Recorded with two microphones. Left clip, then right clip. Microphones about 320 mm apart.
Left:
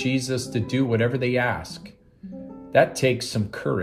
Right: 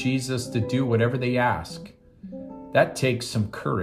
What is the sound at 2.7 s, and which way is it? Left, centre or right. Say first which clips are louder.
Speech: left 2 dB; centre.